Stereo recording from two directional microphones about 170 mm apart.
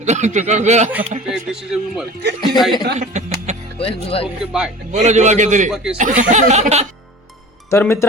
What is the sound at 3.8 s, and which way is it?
Speech, 35° left (ahead or behind).